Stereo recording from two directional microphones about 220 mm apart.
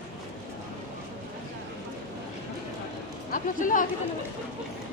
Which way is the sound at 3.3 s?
35° left (ahead or behind).